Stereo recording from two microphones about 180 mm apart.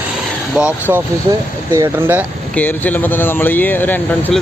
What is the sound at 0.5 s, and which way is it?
Speech, 5° right (ahead or behind).